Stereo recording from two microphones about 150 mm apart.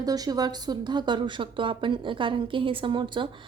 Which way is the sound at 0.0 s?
25° right (ahead or behind).